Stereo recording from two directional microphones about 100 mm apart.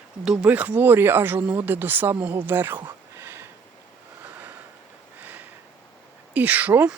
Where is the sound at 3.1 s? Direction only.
20° right (ahead or behind).